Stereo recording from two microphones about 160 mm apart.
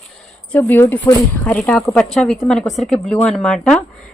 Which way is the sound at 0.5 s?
10° left (ahead or behind).